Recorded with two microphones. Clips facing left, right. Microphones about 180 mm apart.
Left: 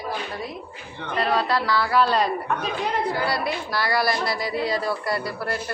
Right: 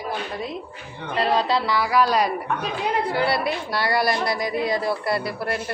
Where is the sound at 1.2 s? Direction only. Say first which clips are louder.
Right 2 dB; 25° right (ahead or behind).